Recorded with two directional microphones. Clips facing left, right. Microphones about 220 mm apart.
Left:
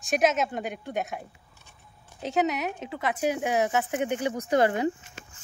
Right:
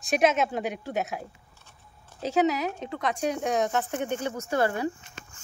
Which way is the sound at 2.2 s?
Centre (ahead or behind).